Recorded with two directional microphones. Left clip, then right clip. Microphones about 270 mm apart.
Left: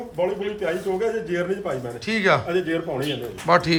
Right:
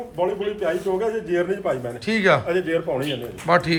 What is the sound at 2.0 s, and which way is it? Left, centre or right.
Speech, centre.